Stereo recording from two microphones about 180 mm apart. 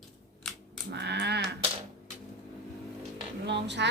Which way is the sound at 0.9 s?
70° right (ahead or behind).